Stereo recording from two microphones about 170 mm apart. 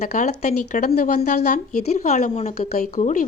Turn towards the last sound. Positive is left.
turn(degrees=45)  # may be behind; listen again after turning